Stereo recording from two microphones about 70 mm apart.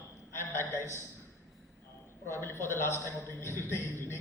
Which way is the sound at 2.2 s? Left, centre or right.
Left.